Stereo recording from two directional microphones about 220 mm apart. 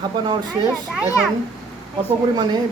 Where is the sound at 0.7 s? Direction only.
Centre (ahead or behind).